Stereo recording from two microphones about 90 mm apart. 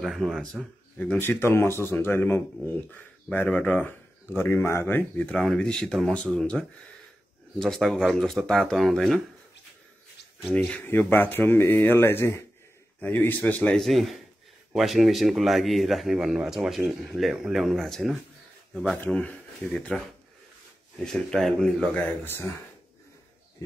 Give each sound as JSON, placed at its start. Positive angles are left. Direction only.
{"t": 0.0, "sound": "a man's voice", "side_deg": 0}
{"t": 0.9, "sound": "speech", "side_deg": 25}
{"t": 5.4, "sound": "a man's voice", "side_deg": 5}
{"t": 10.5, "sound": "speech", "side_deg": 15}
{"t": 13.7, "sound": "a man's voice", "side_deg": 0}
{"t": 18.9, "sound": "speech", "side_deg": 10}
{"t": 21.0, "sound": "a man's voice", "side_deg": 5}
{"t": 22.2, "sound": "speech", "side_deg": 25}